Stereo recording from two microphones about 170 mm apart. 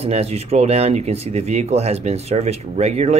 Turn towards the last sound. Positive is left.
turn(degrees=-40)  # may be behind; listen again after turning